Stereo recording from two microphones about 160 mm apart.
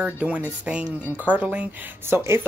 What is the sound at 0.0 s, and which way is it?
Speech, 10° right (ahead or behind).